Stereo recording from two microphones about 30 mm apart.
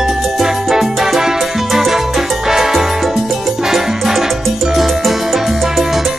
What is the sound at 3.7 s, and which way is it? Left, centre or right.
Music, centre.